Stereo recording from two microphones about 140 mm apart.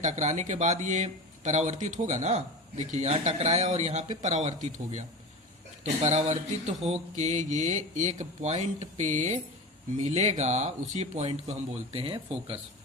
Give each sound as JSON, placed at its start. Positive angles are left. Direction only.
{"t": 0.0, "sound": "speech", "side_deg": -60}